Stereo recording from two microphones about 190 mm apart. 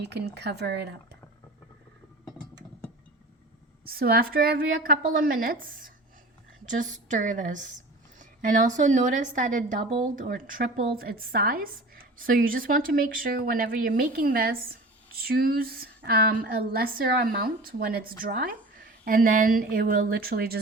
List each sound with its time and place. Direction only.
0.3 s speech: 60° right (ahead or behind)
3.8 s a woman's voice: 50° right (ahead or behind)